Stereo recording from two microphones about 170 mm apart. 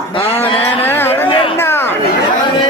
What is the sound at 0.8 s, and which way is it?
Speech, 15° left (ahead or behind).